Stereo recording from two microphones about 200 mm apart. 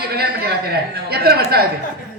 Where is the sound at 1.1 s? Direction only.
50° right (ahead or behind).